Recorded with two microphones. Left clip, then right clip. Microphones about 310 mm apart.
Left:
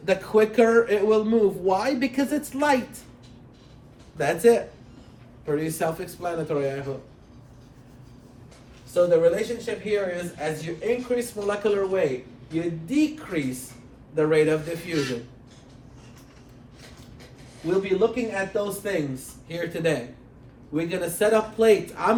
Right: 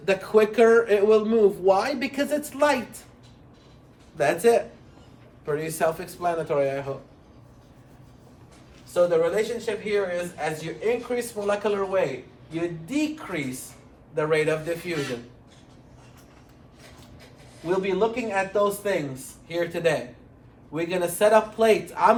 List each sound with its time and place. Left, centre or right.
0.0 s speech: centre
4.2 s speech: centre
8.9 s speech: centre
12.9 s a man's voice: centre
17.7 s a man's voice: centre